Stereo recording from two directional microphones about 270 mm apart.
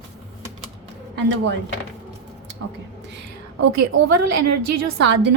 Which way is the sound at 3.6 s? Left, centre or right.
Right.